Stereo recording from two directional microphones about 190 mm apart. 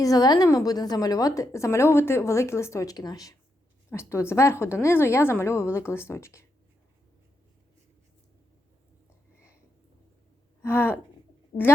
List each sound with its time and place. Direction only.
0.0 s a woman's voice: 20° left (ahead or behind)
10.6 s speech: 10° left (ahead or behind)
11.5 s a woman's voice: 35° left (ahead or behind)